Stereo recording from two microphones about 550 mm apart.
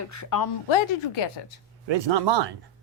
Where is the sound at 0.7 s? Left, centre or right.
Left.